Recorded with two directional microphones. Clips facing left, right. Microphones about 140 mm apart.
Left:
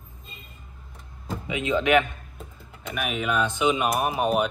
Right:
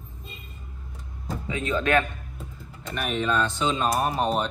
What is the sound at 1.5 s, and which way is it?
Speech, 20° left (ahead or behind).